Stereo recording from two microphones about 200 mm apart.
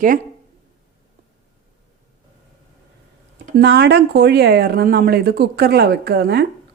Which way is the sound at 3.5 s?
55° right (ahead or behind).